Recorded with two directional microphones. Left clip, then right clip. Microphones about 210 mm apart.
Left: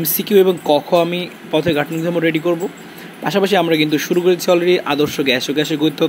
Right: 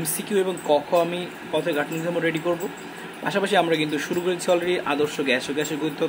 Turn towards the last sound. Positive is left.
turn(degrees=25)  # may be behind; listen again after turning